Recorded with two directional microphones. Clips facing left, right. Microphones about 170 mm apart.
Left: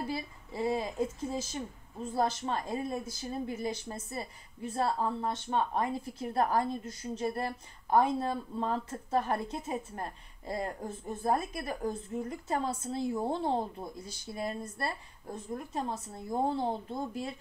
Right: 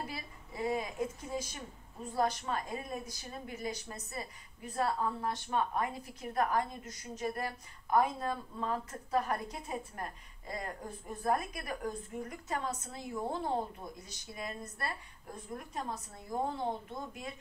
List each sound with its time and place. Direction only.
0.1 s a woman's voice: 30° left (ahead or behind)